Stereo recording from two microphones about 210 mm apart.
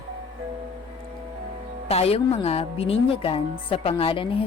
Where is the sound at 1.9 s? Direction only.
30° left (ahead or behind).